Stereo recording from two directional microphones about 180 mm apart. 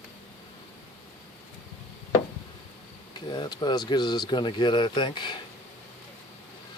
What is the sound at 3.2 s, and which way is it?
Speech, 25° left (ahead or behind).